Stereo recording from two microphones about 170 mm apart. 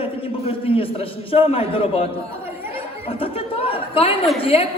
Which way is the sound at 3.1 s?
35° left (ahead or behind).